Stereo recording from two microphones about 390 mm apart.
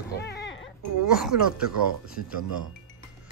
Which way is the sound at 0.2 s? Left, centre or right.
Left.